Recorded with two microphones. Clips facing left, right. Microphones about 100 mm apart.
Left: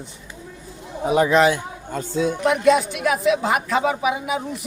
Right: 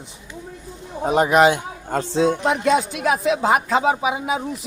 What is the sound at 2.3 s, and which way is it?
Speech, 30° right (ahead or behind).